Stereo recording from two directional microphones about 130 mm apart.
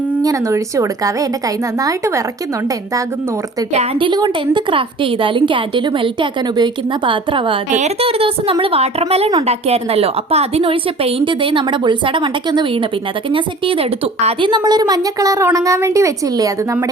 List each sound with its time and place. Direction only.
0.2 s a woman's voice: 25° right (ahead or behind)
4.0 s a woman's voice: 35° right (ahead or behind)
14.5 s a woman's voice: 30° right (ahead or behind)